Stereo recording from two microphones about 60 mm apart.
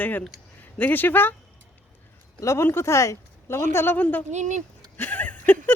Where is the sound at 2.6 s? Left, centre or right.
Left.